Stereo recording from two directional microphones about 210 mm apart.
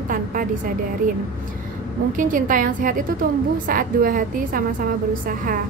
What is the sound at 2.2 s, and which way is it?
A woman's voice, 40° right (ahead or behind).